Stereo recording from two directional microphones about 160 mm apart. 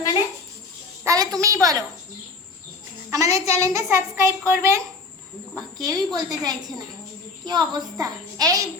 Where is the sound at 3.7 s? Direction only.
20° right (ahead or behind).